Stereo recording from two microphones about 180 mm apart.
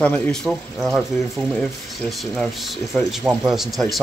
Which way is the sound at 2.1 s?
Centre (ahead or behind).